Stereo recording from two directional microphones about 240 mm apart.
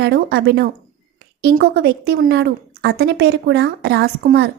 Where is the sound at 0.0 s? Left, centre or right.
Right.